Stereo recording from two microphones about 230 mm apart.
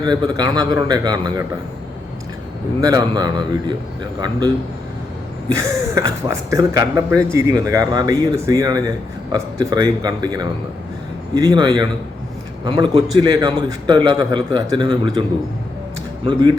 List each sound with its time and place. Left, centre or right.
0.0 s speech: centre
2.8 s speech: centre
5.5 s a man's voice: centre
16.2 s a man's voice: centre